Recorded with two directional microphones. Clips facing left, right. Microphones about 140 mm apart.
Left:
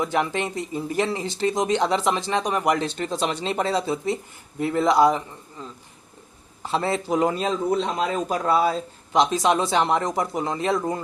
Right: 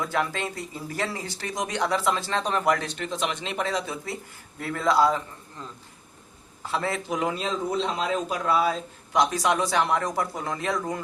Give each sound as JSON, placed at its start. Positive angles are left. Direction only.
{"t": 0.0, "sound": "speech", "side_deg": 20}
{"t": 2.7, "sound": "speech", "side_deg": 30}
{"t": 6.6, "sound": "speech", "side_deg": 25}